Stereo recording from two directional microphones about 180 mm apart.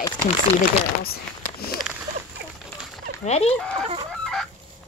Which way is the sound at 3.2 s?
35° left (ahead or behind).